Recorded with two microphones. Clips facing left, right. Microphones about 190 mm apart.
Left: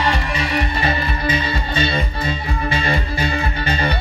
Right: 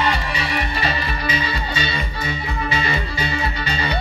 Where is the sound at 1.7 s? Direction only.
50° left (ahead or behind).